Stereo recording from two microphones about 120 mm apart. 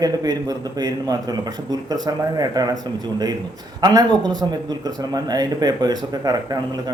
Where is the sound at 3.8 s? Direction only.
30° right (ahead or behind).